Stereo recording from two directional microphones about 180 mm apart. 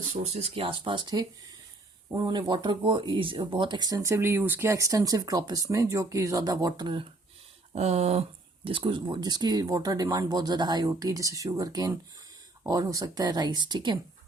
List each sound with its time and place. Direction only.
0.1 s speech: 35° right (ahead or behind)
7.7 s speech: 40° right (ahead or behind)